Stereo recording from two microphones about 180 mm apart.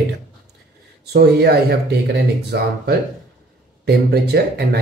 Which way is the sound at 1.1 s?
65° right (ahead or behind).